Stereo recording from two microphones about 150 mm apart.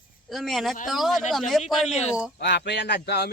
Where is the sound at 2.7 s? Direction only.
90° left.